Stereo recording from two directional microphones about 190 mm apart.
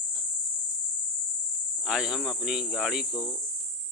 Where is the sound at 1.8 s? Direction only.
Centre (ahead or behind).